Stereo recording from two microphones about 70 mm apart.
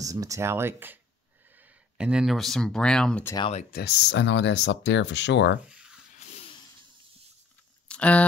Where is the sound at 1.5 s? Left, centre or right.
Right.